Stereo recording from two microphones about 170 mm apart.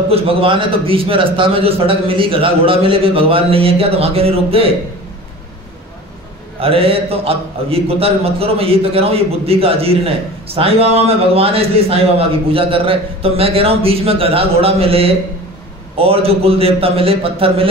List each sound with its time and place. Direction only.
0.1 s a man's voice: 35° right (ahead or behind)
6.6 s a man's voice: 35° right (ahead or behind)